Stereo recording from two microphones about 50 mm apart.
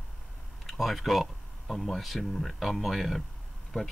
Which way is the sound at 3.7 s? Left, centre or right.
Centre.